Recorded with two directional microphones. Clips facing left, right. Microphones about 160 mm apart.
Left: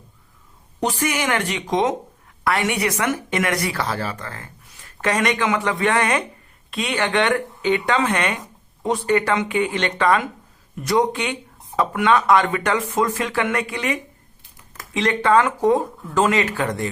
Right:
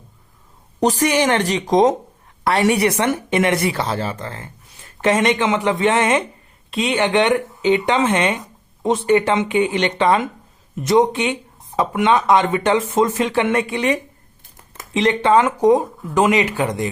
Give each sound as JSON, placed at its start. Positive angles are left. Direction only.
{"t": 0.8, "sound": "a woman's voice", "side_deg": -35}